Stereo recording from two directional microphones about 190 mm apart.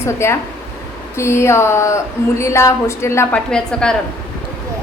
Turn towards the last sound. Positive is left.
turn(degrees=5)  # may be behind; listen again after turning